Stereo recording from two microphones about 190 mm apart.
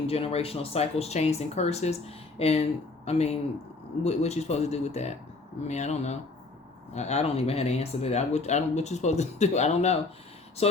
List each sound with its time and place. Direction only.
0.1 s speech: 30° left (ahead or behind)